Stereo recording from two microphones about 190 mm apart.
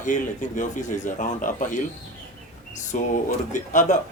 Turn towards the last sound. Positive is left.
turn(degrees=40)  # may be behind; listen again after turning